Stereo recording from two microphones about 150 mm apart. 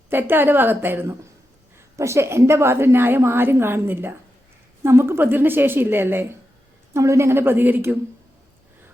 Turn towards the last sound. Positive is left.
turn(degrees=-15)  # may be behind; listen again after turning